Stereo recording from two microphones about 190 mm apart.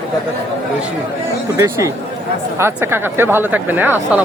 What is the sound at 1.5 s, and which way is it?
Speech, 15° right (ahead or behind).